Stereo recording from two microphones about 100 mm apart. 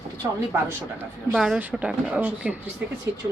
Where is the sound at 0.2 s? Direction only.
35° right (ahead or behind).